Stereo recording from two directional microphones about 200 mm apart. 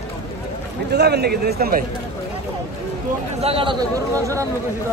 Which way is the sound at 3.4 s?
25° right (ahead or behind).